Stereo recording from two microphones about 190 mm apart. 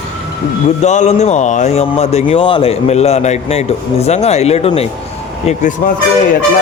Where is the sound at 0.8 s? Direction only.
40° left (ahead or behind).